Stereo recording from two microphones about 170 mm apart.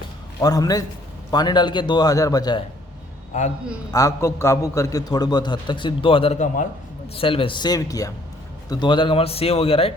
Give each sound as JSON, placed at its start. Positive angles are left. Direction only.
{"t": 0.4, "sound": "a man's voice", "side_deg": 20}
{"t": 3.9, "sound": "a man's voice", "side_deg": 15}
{"t": 7.2, "sound": "a man's voice", "side_deg": 30}